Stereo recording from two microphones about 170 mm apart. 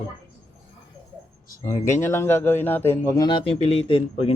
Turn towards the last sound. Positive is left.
turn(degrees=35)  # may be behind; listen again after turning